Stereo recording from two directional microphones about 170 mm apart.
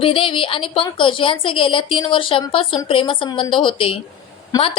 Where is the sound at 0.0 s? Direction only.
30° left (ahead or behind).